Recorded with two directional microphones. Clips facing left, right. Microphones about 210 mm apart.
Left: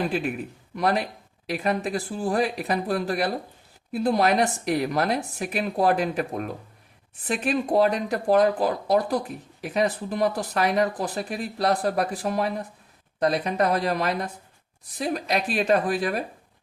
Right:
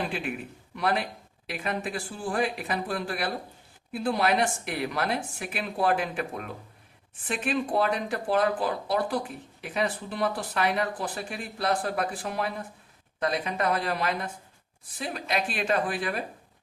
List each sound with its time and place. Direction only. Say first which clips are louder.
0.8 s speech: left 4 dB; 40° left (ahead or behind)